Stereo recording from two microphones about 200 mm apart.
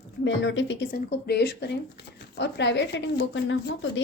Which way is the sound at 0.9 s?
50° left (ahead or behind).